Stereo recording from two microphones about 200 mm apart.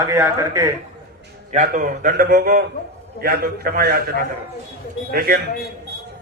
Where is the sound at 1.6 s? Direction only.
45° right (ahead or behind).